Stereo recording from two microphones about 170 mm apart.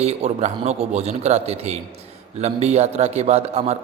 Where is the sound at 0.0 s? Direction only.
40° right (ahead or behind).